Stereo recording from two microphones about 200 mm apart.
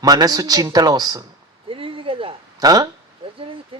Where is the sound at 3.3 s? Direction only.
25° right (ahead or behind).